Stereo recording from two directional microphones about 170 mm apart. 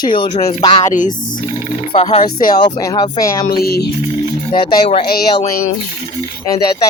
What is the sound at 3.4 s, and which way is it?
Speech, 65° left (ahead or behind).